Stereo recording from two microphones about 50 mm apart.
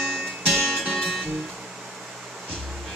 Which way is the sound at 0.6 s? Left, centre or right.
Centre.